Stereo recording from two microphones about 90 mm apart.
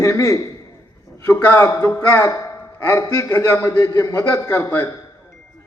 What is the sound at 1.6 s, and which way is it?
A man's voice, 40° left (ahead or behind).